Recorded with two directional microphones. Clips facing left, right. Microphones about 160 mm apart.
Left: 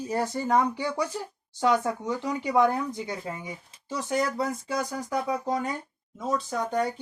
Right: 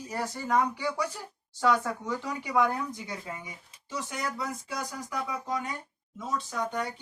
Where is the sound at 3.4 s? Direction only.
30° left (ahead or behind).